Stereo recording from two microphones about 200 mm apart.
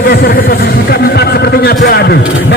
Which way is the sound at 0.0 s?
45° left (ahead or behind).